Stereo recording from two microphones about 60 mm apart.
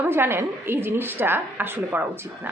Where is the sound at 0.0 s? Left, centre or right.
Right.